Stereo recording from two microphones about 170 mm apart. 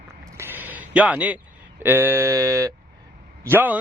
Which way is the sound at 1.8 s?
15° right (ahead or behind).